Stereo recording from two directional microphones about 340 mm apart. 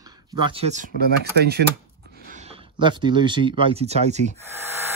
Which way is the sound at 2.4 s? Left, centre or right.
Centre.